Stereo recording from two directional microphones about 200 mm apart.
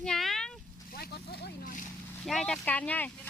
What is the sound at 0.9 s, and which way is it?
Speech, 50° left (ahead or behind).